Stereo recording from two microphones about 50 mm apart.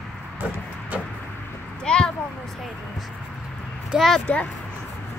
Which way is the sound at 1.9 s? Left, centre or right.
Centre.